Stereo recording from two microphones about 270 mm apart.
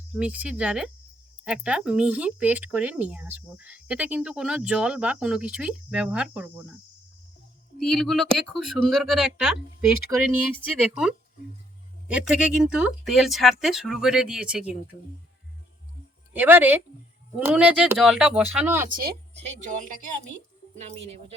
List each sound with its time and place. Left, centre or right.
0.1 s speech: centre
7.9 s speech: centre
16.3 s speech: centre
18.9 s a woman's voice: right